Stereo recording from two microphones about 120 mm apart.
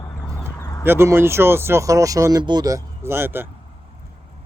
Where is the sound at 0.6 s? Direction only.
30° left (ahead or behind).